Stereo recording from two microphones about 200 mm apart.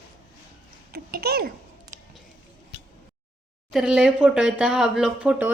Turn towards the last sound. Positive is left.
turn(degrees=-5)  # may be behind; listen again after turning